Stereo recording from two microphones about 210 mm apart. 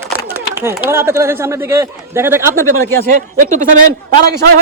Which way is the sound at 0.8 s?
10° right (ahead or behind).